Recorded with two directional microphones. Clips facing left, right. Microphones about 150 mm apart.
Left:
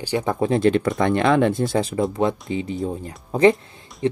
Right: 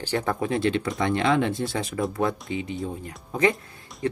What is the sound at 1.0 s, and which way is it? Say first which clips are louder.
Speech: left 4 dB; 55° left (ahead or behind).